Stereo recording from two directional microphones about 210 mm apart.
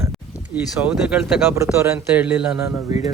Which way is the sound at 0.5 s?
5° right (ahead or behind).